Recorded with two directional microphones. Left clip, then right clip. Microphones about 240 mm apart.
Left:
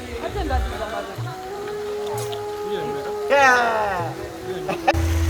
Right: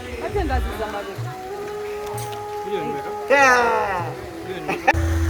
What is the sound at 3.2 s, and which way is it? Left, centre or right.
Music, right.